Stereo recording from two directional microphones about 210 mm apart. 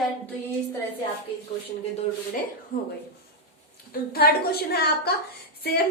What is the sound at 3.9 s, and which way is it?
A woman's voice, 45° left (ahead or behind).